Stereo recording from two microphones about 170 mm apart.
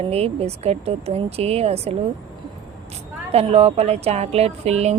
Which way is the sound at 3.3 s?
35° right (ahead or behind).